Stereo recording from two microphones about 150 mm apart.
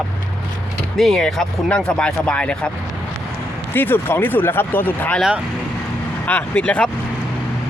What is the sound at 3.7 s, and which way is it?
Speech, 15° left (ahead or behind).